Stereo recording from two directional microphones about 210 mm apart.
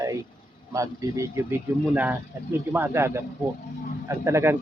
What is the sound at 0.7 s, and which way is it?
Speech, 15° right (ahead or behind).